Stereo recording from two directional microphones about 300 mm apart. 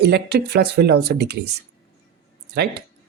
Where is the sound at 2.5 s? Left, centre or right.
Right.